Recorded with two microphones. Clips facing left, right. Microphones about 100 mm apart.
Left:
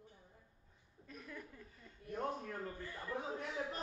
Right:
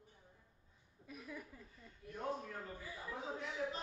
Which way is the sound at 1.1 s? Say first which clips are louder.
Right 1 dB; 10° right (ahead or behind).